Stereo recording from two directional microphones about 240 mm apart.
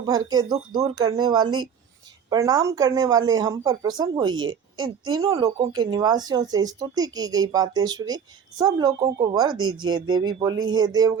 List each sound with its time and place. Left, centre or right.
0.0 s speech: centre
9.6 s speech: right
9.8 s speech: centre